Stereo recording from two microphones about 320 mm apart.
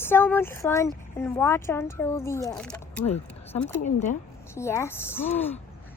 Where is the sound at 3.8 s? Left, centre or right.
Left.